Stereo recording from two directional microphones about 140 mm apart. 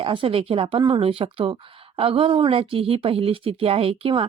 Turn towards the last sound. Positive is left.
turn(degrees=-40)  # may be behind; listen again after turning